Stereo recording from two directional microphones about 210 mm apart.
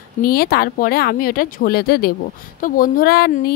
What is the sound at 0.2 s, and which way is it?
Speech, 45° left (ahead or behind).